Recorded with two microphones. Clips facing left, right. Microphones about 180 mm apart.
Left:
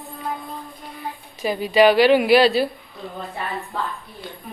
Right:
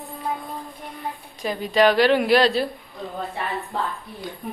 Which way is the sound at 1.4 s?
5° left (ahead or behind).